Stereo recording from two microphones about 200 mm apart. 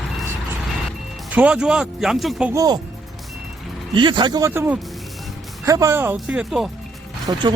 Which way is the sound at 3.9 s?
25° right (ahead or behind).